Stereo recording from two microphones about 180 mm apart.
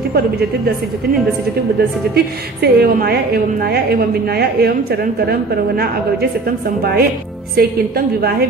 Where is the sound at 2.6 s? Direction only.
60° right (ahead or behind).